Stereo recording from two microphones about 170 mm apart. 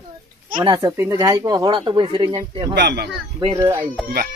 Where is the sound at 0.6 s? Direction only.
25° right (ahead or behind).